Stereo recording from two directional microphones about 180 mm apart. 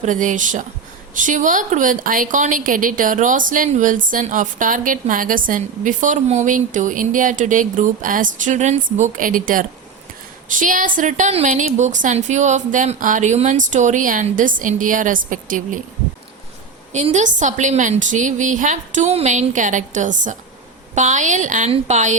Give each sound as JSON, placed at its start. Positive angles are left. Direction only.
{"t": 0.0, "sound": "a woman's voice", "side_deg": -45}
{"t": 16.9, "sound": "a woman's voice", "side_deg": -40}